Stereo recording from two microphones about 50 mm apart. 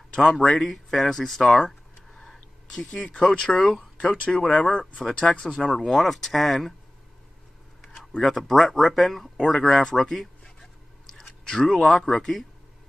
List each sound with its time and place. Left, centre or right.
0.1 s speech: centre
1.6 s a sound: centre
2.9 s speech: centre
5.8 s speech: centre
8.2 s a man's voice: centre